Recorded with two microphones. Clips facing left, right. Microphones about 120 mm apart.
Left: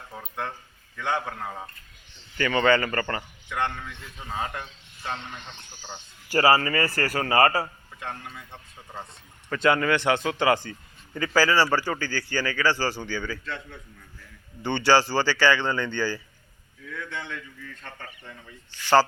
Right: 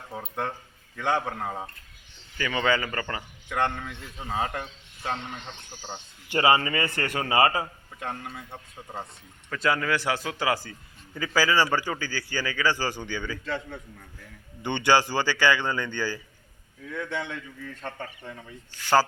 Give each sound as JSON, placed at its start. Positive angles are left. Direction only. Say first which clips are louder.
{"t": 0.9, "sound": "a man's voice", "louder": "right 2 dB", "side_deg": -40}
{"t": 2.4, "sound": "a man's voice", "louder": "left 4 dB", "side_deg": -5}
{"t": 3.5, "sound": "a man's voice", "louder": "right 2 dB", "side_deg": -40}
{"t": 6.2, "sound": "a man's voice", "louder": "left 2 dB", "side_deg": -20}
{"t": 7.9, "sound": "a man's voice", "louder": "right 2 dB", "side_deg": -40}
{"t": 9.5, "sound": "a man's voice", "louder": "left 4 dB", "side_deg": 0}
{"t": 14.6, "sound": "a man's voice", "louder": "left 2 dB", "side_deg": -15}
{"t": 16.9, "sound": "speech", "louder": "right 3 dB", "side_deg": -25}
{"t": 17.8, "sound": "speech", "louder": "right 8 dB", "side_deg": -50}